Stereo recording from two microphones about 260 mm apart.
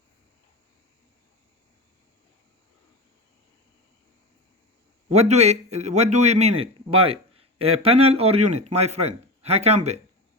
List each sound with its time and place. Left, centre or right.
5.0 s a man's voice: right